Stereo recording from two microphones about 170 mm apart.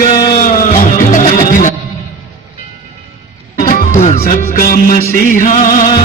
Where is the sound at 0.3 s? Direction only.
55° left (ahead or behind).